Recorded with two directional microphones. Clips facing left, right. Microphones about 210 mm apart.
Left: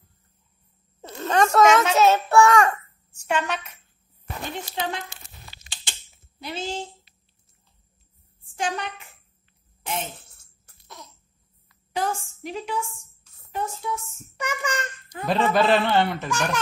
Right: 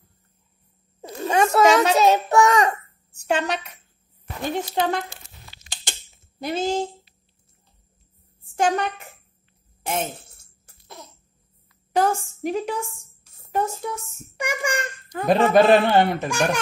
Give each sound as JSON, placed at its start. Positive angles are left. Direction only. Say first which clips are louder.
{"t": 1.1, "sound": "a sound", "louder": "right 1 dB", "side_deg": -10}
{"t": 1.6, "sound": "a woman's voice", "louder": "right 1 dB", "side_deg": -35}
{"t": 2.0, "sound": "a child's voice", "louder": "even", "side_deg": -15}
{"t": 3.1, "sound": "a woman's voice", "louder": "right 3 dB", "side_deg": -35}
{"t": 4.5, "sound": "a woman's voice", "louder": "right 7 dB", "side_deg": -45}
{"t": 6.4, "sound": "a woman's voice", "louder": "right 8 dB", "side_deg": -45}
{"t": 8.5, "sound": "a woman's voice", "louder": "right 7 dB", "side_deg": -45}
{"t": 11.9, "sound": "a woman's voice", "louder": "right 6 dB", "side_deg": -45}
{"t": 14.3, "sound": "a child's voice", "louder": "right 3 dB", "side_deg": -10}
{"t": 15.1, "sound": "a woman's voice", "louder": "right 5 dB", "side_deg": -50}
{"t": 16.1, "sound": "a child's voice", "louder": "right 4 dB", "side_deg": -15}